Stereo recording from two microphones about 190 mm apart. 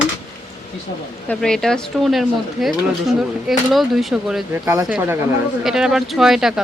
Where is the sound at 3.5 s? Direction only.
Centre (ahead or behind).